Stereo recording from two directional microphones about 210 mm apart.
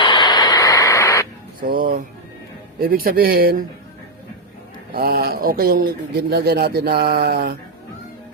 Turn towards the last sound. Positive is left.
turn(degrees=-50)  # may be behind; listen again after turning